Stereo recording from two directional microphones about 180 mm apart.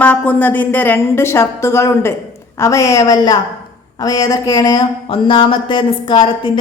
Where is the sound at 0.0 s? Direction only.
10° left (ahead or behind).